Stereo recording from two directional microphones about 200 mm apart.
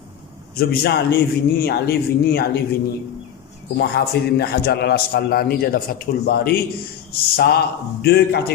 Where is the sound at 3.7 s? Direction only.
55° left (ahead or behind).